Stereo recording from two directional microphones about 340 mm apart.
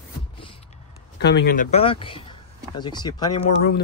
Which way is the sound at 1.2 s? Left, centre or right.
Left.